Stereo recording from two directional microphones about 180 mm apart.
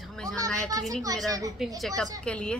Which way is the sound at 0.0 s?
5° left (ahead or behind).